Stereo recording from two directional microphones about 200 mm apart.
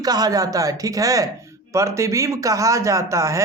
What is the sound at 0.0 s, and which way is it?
Speech, 20° right (ahead or behind).